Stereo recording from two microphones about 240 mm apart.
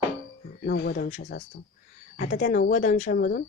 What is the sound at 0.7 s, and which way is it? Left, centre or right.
Speech, left.